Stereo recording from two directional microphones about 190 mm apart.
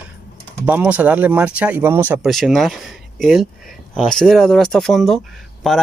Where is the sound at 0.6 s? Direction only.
10° right (ahead or behind).